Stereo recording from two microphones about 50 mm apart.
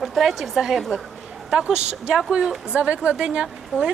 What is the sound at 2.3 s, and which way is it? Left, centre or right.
Speech, centre.